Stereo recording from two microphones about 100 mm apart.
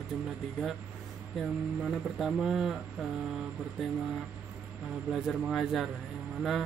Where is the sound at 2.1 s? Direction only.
5° right (ahead or behind).